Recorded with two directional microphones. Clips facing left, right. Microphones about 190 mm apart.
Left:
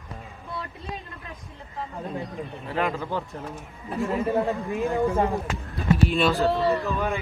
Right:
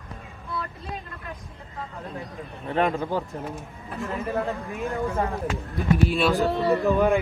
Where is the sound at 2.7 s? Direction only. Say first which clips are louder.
Right 4 dB; 30° right (ahead or behind).